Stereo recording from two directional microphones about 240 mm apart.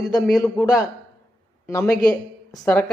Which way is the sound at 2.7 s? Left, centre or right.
Centre.